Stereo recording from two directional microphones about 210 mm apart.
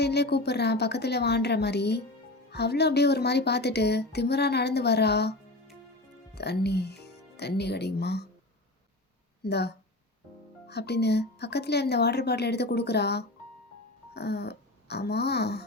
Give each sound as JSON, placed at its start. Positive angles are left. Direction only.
{"t": 0.0, "sound": "a woman's voice", "side_deg": 50}
{"t": 6.3, "sound": "speech", "side_deg": 50}
{"t": 9.4, "sound": "a woman's voice", "side_deg": 50}